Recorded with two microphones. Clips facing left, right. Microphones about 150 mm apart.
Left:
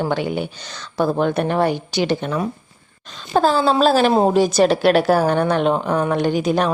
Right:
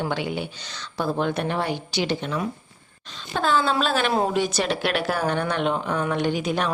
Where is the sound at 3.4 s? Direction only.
40° left (ahead or behind).